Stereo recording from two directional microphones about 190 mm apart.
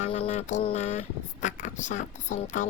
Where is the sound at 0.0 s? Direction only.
35° left (ahead or behind).